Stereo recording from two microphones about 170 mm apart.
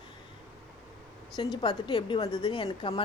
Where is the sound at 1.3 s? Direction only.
25° left (ahead or behind).